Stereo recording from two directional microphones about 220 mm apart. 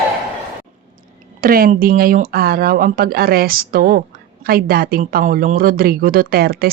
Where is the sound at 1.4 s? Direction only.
40° right (ahead or behind).